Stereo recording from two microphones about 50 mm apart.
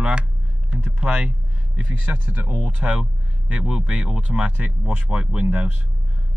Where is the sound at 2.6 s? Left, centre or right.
Centre.